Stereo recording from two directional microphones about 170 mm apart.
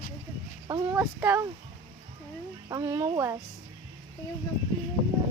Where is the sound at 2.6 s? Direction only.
20° right (ahead or behind).